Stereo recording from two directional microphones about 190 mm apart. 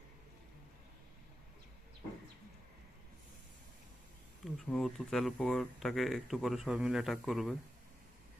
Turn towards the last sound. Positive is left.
turn(degrees=0)  # may be behind; listen again after turning